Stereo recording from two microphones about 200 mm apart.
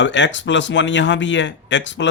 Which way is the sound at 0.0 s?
65° left (ahead or behind).